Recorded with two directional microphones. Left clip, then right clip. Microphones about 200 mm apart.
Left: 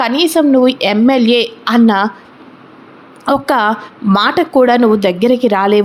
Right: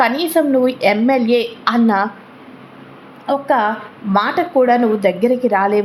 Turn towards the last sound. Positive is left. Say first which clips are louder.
# left 4 dB
turn(degrees=15)  # may be behind; listen again after turning